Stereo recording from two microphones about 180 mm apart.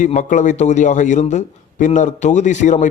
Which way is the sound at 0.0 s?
45° left (ahead or behind).